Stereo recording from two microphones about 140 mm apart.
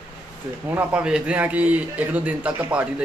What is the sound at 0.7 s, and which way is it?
A man's voice, 10° right (ahead or behind).